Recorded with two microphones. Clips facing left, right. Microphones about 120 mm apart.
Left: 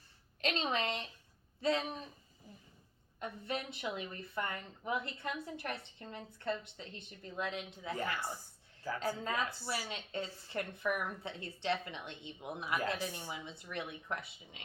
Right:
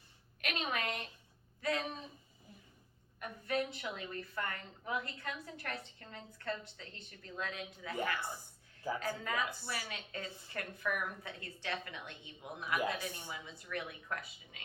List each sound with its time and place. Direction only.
0.4 s a sound: 30° left (ahead or behind)
1.6 s speech: 25° left (ahead or behind)
3.2 s speech: 20° left (ahead or behind)